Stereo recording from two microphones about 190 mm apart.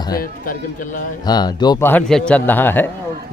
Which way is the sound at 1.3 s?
20° left (ahead or behind).